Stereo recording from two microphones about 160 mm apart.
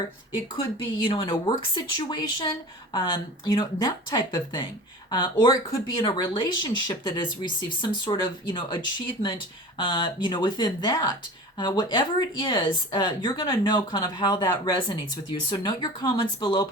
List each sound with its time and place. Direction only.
1.0 s a woman's voice: 30° left (ahead or behind)